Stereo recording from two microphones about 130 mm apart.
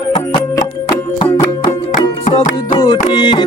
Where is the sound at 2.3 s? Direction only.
40° left (ahead or behind).